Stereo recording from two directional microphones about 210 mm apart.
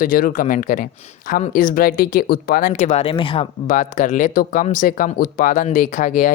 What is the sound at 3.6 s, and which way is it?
Speech, 35° left (ahead or behind).